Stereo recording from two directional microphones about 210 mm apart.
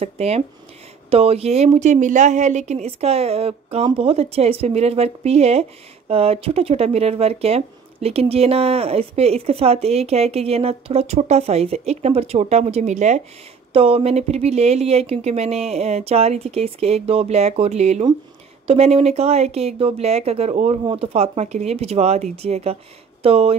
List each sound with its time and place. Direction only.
0.0 s a woman's voice: 30° right (ahead or behind)